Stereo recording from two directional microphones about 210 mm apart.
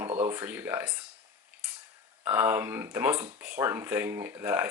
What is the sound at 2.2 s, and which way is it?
Speech, 10° right (ahead or behind).